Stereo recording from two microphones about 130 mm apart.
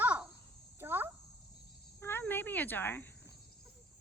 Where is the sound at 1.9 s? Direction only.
15° left (ahead or behind).